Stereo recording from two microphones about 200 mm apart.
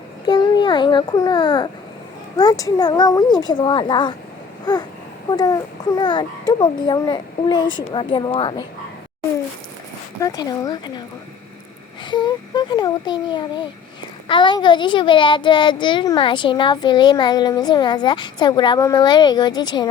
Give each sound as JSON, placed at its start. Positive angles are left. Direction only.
{"t": 0.3, "sound": "a child's voice", "side_deg": 20}
{"t": 4.6, "sound": "a sound", "side_deg": 20}
{"t": 5.3, "sound": "a child's voice", "side_deg": 20}
{"t": 10.2, "sound": "a child's voice", "side_deg": 20}
{"t": 12.1, "sound": "a child's voice", "side_deg": 20}